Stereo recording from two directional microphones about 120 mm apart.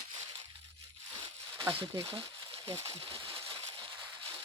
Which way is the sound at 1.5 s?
40° right (ahead or behind).